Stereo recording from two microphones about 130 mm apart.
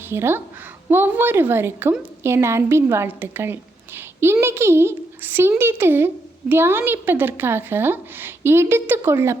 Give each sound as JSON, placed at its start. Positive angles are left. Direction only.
{"t": 0.1, "sound": "a woman's voice", "side_deg": -20}